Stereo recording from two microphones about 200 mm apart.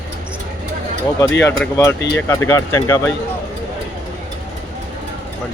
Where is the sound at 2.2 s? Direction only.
10° left (ahead or behind).